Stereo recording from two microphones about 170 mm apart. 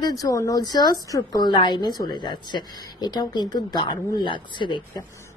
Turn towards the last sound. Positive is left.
turn(degrees=30)  # may be behind; listen again after turning